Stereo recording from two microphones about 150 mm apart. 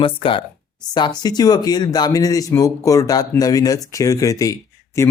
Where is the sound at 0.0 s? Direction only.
35° left (ahead or behind).